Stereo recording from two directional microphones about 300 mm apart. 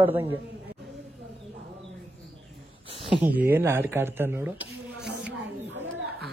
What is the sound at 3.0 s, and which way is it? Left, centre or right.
Speech, centre.